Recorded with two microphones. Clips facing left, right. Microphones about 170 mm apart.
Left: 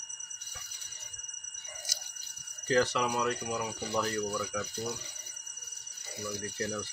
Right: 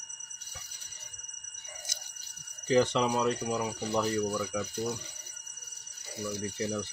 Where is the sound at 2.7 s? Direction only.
20° right (ahead or behind).